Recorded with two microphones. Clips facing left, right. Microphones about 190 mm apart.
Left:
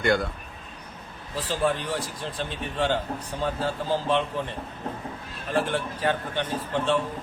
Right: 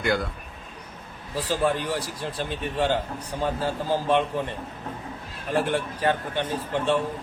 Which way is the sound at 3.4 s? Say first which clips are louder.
Right 1 dB; 15° right (ahead or behind).